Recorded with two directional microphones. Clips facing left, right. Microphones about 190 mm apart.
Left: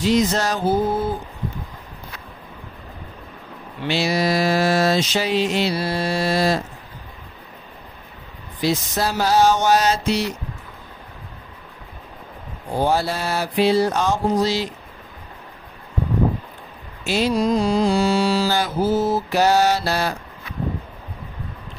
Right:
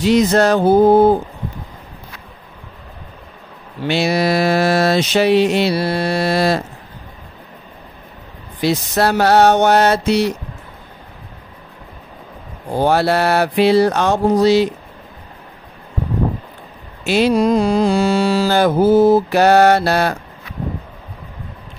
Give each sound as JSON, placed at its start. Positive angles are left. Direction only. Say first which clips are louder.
{"t": 0.0, "sound": "mantra", "louder": "right 6 dB", "side_deg": -65}
{"t": 3.8, "sound": "mantra", "louder": "right 4 dB", "side_deg": -60}
{"t": 8.5, "sound": "mantra", "louder": "right 5 dB", "side_deg": -65}
{"t": 12.8, "sound": "mantra", "louder": "right 7 dB", "side_deg": -70}
{"t": 17.0, "sound": "mantra", "louder": "right 6 dB", "side_deg": -65}